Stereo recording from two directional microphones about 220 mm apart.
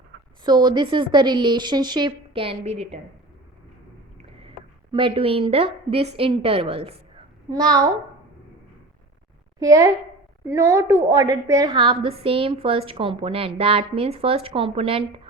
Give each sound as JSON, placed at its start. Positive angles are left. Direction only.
{"t": 0.4, "sound": "a woman's voice", "side_deg": -20}
{"t": 4.3, "sound": "a woman's voice", "side_deg": -25}
{"t": 9.6, "sound": "a child's voice", "side_deg": -15}